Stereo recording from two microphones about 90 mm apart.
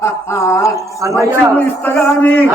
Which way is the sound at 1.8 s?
20° left (ahead or behind).